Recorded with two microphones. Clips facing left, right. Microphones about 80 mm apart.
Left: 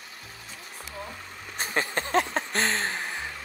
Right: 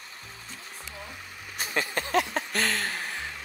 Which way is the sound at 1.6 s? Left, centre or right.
Left.